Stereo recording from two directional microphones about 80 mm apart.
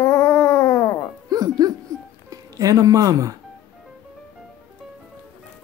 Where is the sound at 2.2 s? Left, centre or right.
Right.